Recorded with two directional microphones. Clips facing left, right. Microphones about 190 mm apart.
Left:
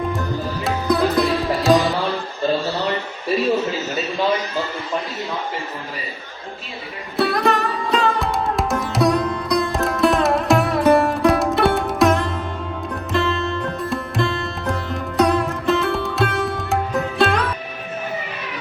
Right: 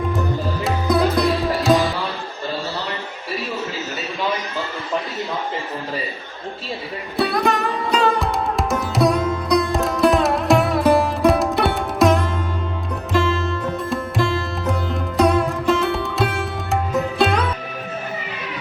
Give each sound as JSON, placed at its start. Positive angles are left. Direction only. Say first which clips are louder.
{"t": 0.1, "sound": "sitar", "louder": "right 1 dB", "side_deg": 0}
{"t": 7.2, "sound": "music", "louder": "left 1 dB", "side_deg": 0}